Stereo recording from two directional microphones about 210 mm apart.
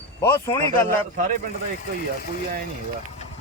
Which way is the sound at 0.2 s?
10° left (ahead or behind).